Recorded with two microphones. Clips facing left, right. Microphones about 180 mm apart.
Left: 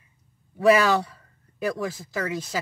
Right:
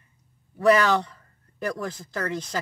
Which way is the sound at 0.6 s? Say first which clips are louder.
Left 1 dB; 10° left (ahead or behind).